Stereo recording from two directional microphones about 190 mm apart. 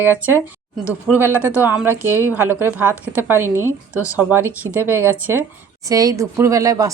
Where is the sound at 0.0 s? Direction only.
10° right (ahead or behind).